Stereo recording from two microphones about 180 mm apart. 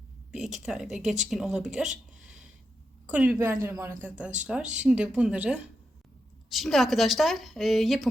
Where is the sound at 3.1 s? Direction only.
10° right (ahead or behind).